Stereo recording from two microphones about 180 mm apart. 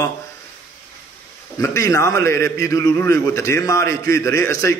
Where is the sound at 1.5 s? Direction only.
15° left (ahead or behind).